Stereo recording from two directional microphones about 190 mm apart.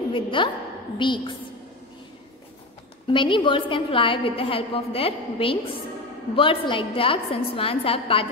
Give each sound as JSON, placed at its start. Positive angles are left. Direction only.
{"t": 0.1, "sound": "a woman's voice", "side_deg": 25}
{"t": 3.1, "sound": "a woman's voice", "side_deg": 25}